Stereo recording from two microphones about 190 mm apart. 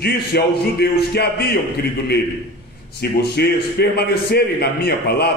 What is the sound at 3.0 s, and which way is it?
A man's voice, 55° left (ahead or behind).